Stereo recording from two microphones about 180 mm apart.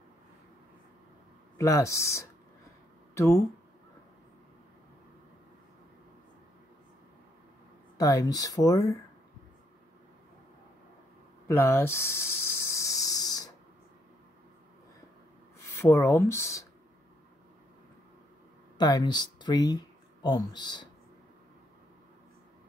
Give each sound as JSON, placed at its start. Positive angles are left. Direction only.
{"t": 1.6, "sound": "speech", "side_deg": 15}
{"t": 8.0, "sound": "speech", "side_deg": 20}
{"t": 11.4, "sound": "a sound", "side_deg": 15}
{"t": 15.6, "sound": "speech", "side_deg": 15}
{"t": 18.8, "sound": "speech", "side_deg": 20}